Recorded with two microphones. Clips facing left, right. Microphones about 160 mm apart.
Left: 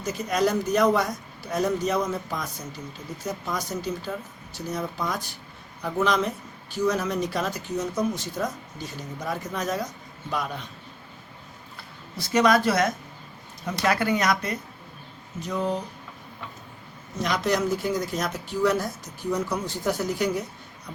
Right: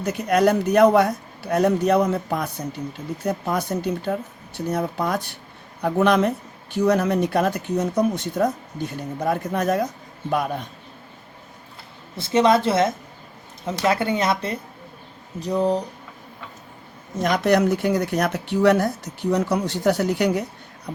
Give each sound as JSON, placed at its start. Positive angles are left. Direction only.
{"t": 0.0, "sound": "speech", "side_deg": -60}
{"t": 12.1, "sound": "speech", "side_deg": -25}
{"t": 17.2, "sound": "speech", "side_deg": -50}